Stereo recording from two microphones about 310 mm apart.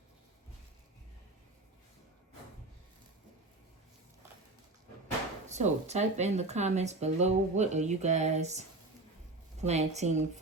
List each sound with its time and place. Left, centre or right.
5.5 s speech: right